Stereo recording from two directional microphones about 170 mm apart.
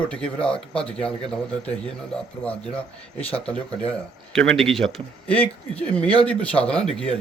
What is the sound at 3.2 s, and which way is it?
Speech, 35° left (ahead or behind).